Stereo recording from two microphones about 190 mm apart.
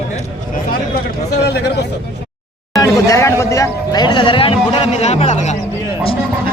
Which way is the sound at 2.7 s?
20° left (ahead or behind).